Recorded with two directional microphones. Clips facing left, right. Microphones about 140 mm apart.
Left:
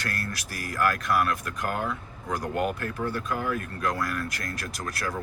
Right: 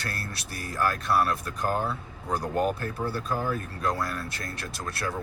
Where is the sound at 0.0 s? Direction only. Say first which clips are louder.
Left 3 dB; 30° right (ahead or behind).